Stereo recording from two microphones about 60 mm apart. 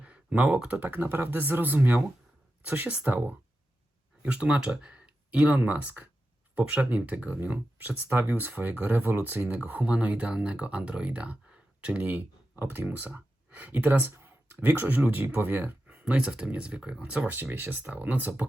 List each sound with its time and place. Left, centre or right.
0.0 s computer keyboard: right
0.7 s speech: right
13.1 s a sound: right
14.0 s speech: right
15.9 s speech: centre
17.2 s speech: right